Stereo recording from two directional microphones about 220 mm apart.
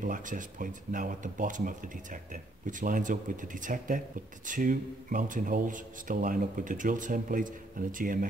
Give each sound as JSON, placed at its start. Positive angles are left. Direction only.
{"t": 0.0, "sound": "speech", "side_deg": -35}